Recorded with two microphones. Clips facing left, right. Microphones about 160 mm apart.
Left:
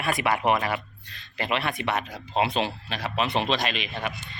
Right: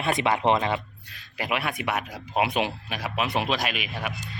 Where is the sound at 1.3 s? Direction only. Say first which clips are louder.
Left 1 dB; 10° right (ahead or behind).